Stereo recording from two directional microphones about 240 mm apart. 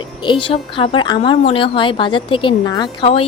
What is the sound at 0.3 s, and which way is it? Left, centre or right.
A woman's voice, left.